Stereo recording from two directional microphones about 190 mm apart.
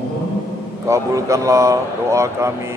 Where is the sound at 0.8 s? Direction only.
15° right (ahead or behind).